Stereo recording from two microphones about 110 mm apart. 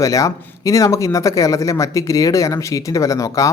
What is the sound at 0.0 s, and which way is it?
Speech, 30° left (ahead or behind).